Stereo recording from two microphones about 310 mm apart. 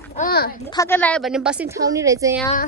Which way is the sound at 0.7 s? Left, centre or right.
Centre.